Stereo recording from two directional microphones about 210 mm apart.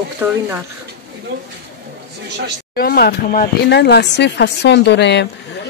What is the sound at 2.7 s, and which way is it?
Speech, 45° left (ahead or behind).